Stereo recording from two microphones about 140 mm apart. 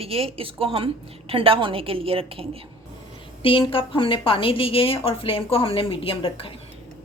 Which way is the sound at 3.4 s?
40° left (ahead or behind).